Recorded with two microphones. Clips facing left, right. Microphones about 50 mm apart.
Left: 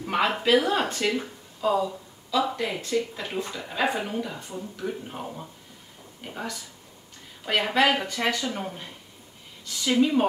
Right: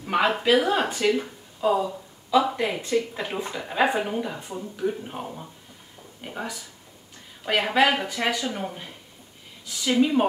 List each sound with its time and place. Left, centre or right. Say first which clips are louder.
0.0 s a sound: right 2 dB; centre
0.3 s speech: even; centre
2.5 s speech: right 2 dB; centre